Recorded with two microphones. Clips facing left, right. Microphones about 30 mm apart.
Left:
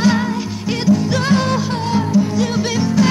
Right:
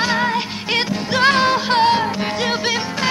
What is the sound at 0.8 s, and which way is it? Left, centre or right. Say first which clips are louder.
Music: left 2 dB; right.